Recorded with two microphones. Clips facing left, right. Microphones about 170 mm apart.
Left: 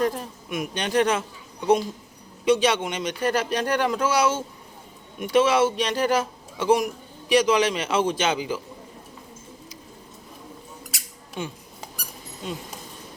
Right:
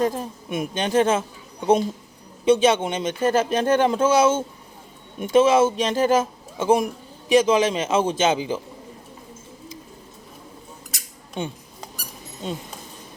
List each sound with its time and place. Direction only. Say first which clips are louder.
0.0 s speech: right 2 dB; 25° right (ahead or behind)
2.4 s speech: right 3 dB; 25° right (ahead or behind)
11.4 s speech: right 3 dB; 25° right (ahead or behind)